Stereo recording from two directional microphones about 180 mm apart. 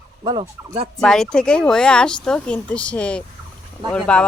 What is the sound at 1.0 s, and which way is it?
Speech, 5° left (ahead or behind).